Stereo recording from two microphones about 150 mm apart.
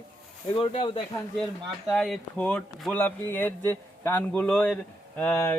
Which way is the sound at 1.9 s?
5° left (ahead or behind).